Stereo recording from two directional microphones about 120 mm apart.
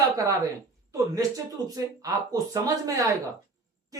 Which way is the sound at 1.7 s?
30° right (ahead or behind).